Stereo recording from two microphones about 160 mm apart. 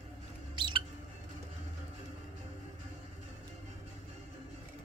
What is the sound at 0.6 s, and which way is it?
Mouse, 30° right (ahead or behind).